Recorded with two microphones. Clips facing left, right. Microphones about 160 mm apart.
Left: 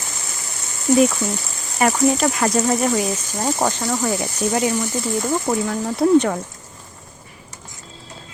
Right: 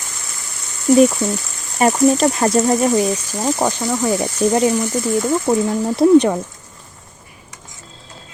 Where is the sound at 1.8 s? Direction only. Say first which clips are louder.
Right 4 dB; 30° right (ahead or behind).